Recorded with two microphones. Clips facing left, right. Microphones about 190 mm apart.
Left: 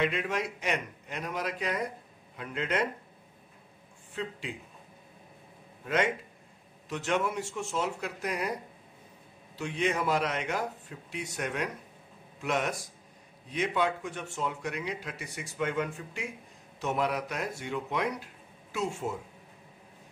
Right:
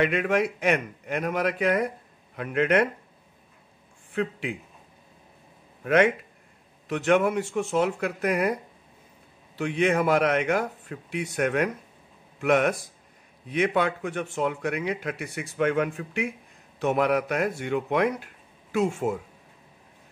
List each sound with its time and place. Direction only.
0.0 s speech: 60° right (ahead or behind)
4.1 s speech: 65° right (ahead or behind)
5.9 s speech: 60° right (ahead or behind)
9.6 s speech: 60° right (ahead or behind)